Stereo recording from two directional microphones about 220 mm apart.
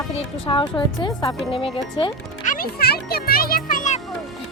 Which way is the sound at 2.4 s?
40° left (ahead or behind).